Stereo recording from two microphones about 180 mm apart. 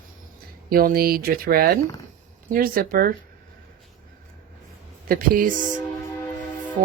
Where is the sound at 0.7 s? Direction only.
55° right (ahead or behind).